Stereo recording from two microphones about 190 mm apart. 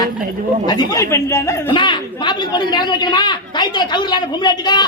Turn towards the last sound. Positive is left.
turn(degrees=20)  # may be behind; listen again after turning